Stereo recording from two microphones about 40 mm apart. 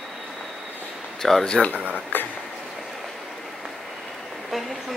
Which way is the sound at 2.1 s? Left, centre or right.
Left.